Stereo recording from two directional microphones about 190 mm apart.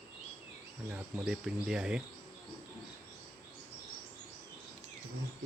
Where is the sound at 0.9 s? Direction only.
5° right (ahead or behind).